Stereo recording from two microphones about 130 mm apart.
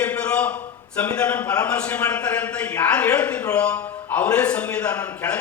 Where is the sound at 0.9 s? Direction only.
10° left (ahead or behind).